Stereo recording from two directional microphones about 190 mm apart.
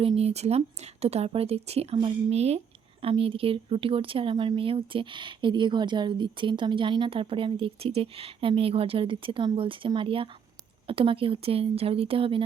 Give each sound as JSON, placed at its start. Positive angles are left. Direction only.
{"t": 0.0, "sound": "speech", "side_deg": -35}